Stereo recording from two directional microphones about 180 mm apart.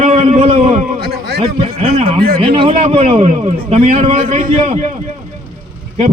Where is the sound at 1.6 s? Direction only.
35° right (ahead or behind).